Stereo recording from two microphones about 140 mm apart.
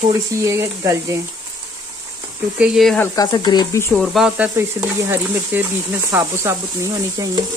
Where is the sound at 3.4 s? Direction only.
30° left (ahead or behind).